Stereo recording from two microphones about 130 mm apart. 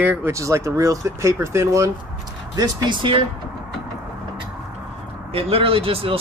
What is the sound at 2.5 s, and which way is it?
Speech, 35° right (ahead or behind).